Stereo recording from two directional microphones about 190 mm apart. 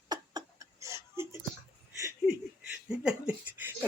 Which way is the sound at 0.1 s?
20° right (ahead or behind).